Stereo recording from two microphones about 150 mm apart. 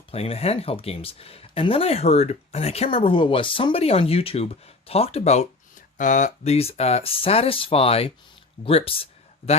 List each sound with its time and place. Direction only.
0.1 s speech: 40° left (ahead or behind)
6.0 s speech: 55° left (ahead or behind); by 9.0 s 40° left (ahead or behind)